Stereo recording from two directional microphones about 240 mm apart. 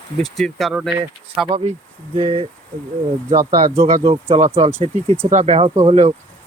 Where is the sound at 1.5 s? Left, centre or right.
Right.